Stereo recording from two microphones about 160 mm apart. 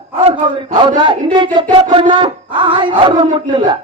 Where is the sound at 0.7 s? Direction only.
30° right (ahead or behind).